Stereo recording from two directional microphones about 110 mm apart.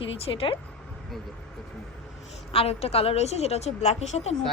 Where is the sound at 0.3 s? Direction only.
55° left (ahead or behind).